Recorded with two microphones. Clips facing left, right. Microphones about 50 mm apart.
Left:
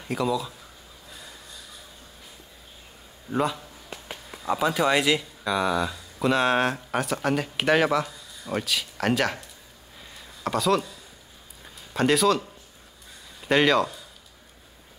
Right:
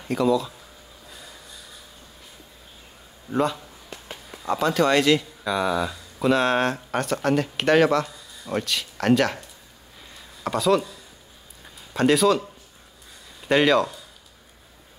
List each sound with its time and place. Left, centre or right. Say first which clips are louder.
0.0 s speech: right 5 dB; centre
3.3 s speech: right 2 dB; centre
10.4 s speech: right 2 dB; centre
11.9 s speech: right 2 dB; centre